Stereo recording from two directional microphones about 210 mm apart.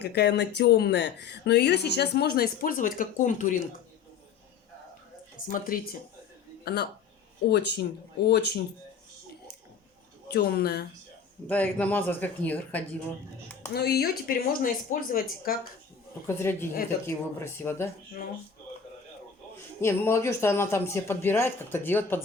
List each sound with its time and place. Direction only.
0.0 s speech: 50° left (ahead or behind); by 3.6 s 35° left (ahead or behind)
5.5 s speech: 45° left (ahead or behind)
10.2 s speech: 50° left (ahead or behind)
11.4 s speech: 5° left (ahead or behind)
13.7 s speech: 50° left (ahead or behind)
16.2 s speech: 10° left (ahead or behind)
19.8 s speech: 10° left (ahead or behind)